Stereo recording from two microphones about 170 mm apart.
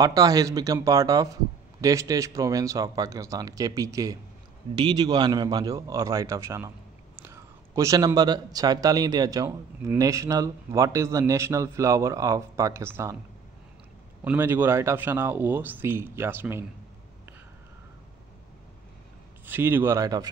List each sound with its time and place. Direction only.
0.0 s a man's voice: 20° right (ahead or behind)
14.2 s a man's voice: 10° right (ahead or behind)
19.4 s a man's voice: 10° right (ahead or behind)